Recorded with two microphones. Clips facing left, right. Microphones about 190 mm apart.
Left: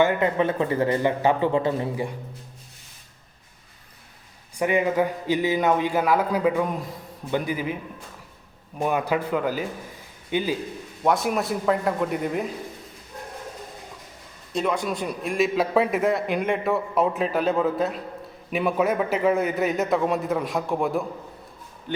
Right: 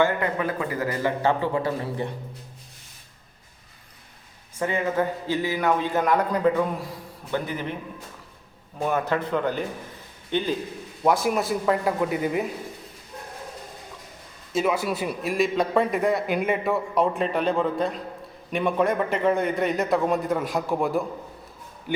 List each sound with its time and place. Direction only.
0.0 s a man's voice: 20° left (ahead or behind)
1.2 s a man's voice: 15° left (ahead or behind)
4.5 s a man's voice: 15° left (ahead or behind)
8.8 s a man's voice: 15° left (ahead or behind); by 12.5 s centre (ahead or behind)
14.5 s a man's voice: 5° right (ahead or behind)